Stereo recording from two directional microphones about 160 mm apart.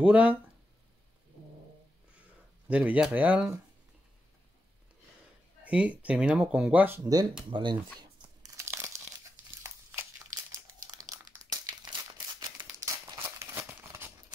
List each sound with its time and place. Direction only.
0.0 s speech: 10° right (ahead or behind)
2.7 s speech: 10° right (ahead or behind)
5.6 s speech: 10° right (ahead or behind)
7.0 s speech: 25° right (ahead or behind)
8.0 s tearing: 20° right (ahead or behind)
9.6 s a sound: 15° right (ahead or behind)
10.8 s crumpling: 20° right (ahead or behind)
12.4 s a sound: 20° right (ahead or behind)